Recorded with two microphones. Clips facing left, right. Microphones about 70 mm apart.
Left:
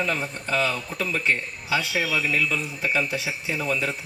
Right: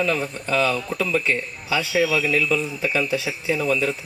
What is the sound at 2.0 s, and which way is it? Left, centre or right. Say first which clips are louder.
Speech: right 4 dB; left.